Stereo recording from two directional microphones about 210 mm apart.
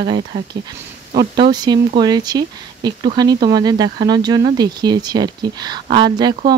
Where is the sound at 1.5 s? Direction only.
20° right (ahead or behind).